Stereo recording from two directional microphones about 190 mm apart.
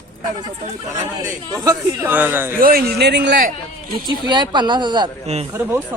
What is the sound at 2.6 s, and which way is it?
Speech, 50° right (ahead or behind).